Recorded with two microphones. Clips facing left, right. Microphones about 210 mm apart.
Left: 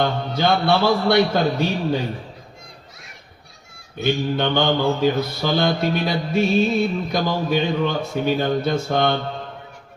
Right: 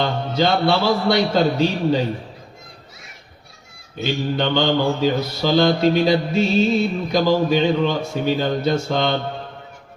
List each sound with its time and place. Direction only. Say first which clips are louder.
0.0 s music: right 1 dB; 55° left (ahead or behind)
4.4 s mantra: right 1 dB; 55° left (ahead or behind)
5.9 s music: right 4 dB; 55° left (ahead or behind)